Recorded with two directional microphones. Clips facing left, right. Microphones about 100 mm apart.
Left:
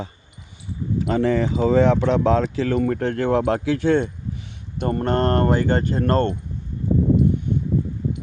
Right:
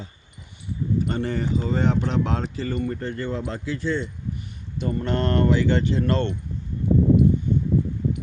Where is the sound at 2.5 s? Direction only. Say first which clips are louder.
Left 6 dB; 90° left; by 6.3 s 45° left (ahead or behind).